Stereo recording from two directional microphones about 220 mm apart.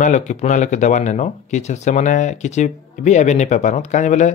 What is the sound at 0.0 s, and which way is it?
Speech, 35° left (ahead or behind).